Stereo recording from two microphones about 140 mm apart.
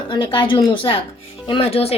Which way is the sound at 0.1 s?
40° left (ahead or behind).